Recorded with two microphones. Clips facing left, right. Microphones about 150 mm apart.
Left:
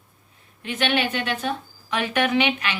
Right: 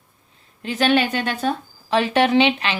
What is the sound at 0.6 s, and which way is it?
A woman's voice, 35° right (ahead or behind).